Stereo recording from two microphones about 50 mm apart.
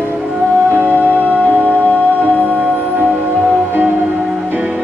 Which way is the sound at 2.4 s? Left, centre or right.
Right.